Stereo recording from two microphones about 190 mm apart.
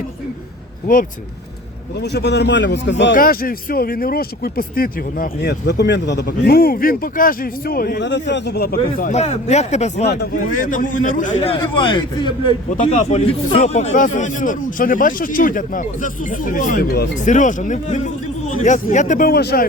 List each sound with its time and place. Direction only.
2.0 s speech: 60° left (ahead or behind)
3.2 s a man's voice: 50° left (ahead or behind); by 12.5 s 25° left (ahead or behind)
12.7 s speech: 40° left (ahead or behind); by 19.6 s 55° left (ahead or behind)